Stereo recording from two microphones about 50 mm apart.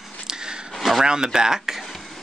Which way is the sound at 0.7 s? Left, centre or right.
Centre.